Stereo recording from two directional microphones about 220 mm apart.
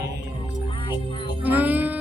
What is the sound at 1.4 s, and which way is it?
Music, 10° right (ahead or behind).